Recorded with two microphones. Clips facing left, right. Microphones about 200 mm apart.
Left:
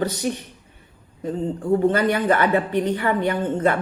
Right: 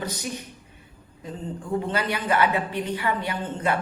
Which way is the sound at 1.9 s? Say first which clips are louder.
Left 5 dB; 45° left (ahead or behind).